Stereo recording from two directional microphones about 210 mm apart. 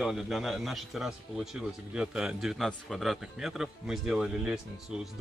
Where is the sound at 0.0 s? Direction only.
Centre (ahead or behind).